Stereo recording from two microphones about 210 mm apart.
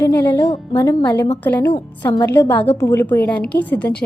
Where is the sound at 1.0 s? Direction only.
10° left (ahead or behind).